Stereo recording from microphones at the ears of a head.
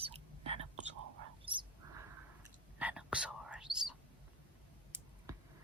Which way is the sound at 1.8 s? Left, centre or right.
Right.